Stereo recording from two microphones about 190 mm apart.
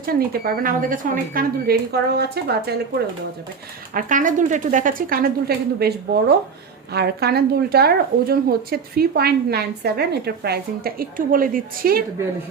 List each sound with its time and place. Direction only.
0.0 s speech: 50° right (ahead or behind)
3.9 s speech: 45° right (ahead or behind)